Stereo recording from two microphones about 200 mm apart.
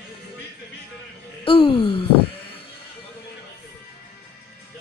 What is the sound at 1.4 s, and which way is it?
Wail, 25° left (ahead or behind).